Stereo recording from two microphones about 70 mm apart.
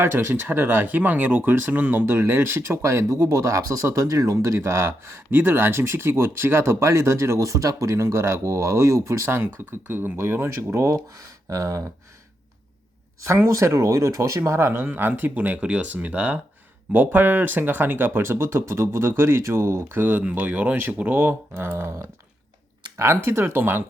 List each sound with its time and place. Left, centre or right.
0.0 s speech: right
13.2 s speech: right
23.2 s speech: right